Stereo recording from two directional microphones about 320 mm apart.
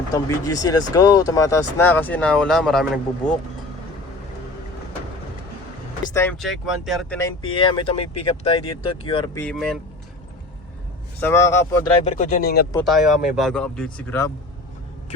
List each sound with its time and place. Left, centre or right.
0.1 s speech: centre
6.1 s speech: centre
11.2 s speech: centre
12.0 s speech: left
12.7 s speech: centre